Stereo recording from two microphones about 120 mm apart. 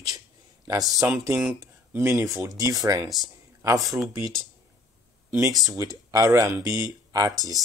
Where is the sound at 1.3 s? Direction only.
15° right (ahead or behind).